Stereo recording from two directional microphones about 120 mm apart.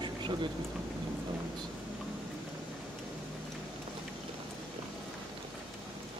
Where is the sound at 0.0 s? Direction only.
40° right (ahead or behind).